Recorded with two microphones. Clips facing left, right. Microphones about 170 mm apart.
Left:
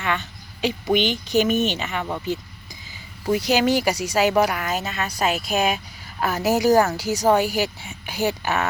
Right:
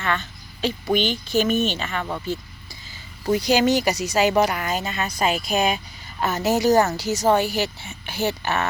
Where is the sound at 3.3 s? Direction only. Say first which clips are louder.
Right 1 dB; 5° left (ahead or behind).